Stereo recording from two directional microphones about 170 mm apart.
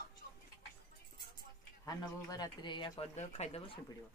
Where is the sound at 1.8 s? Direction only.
20° left (ahead or behind); by 3.8 s 40° left (ahead or behind).